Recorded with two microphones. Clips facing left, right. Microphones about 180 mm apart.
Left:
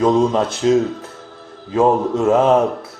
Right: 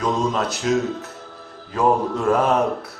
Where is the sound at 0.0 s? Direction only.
30° left (ahead or behind).